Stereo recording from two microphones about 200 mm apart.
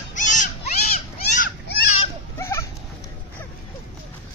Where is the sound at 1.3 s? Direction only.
45° left (ahead or behind).